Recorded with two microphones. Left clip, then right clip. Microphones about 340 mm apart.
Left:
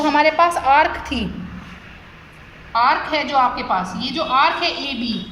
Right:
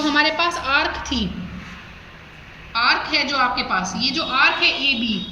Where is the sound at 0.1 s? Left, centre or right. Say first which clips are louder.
Left 4 dB; centre.